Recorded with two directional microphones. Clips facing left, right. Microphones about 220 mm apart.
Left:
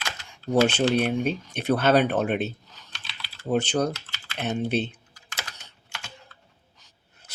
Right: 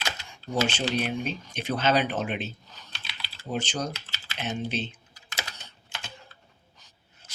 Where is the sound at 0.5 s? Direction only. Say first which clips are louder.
Left 6 dB; 60° left (ahead or behind).